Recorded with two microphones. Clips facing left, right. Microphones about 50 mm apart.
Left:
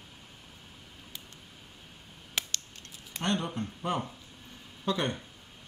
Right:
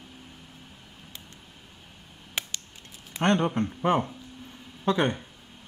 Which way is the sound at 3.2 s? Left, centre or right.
Right.